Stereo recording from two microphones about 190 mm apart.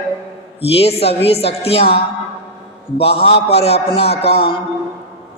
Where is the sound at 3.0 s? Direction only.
30° left (ahead or behind).